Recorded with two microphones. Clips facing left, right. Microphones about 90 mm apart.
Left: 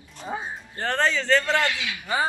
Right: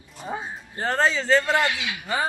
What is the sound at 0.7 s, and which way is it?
Speech, 10° right (ahead or behind).